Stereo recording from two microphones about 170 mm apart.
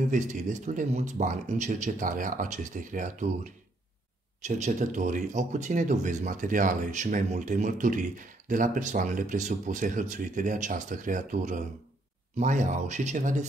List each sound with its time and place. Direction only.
0.1 s speech: 45° right (ahead or behind)
4.4 s speech: 45° right (ahead or behind)